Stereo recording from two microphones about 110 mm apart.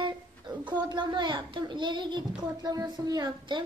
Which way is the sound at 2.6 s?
35° right (ahead or behind).